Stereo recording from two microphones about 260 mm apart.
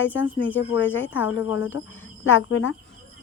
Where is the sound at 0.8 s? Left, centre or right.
Left.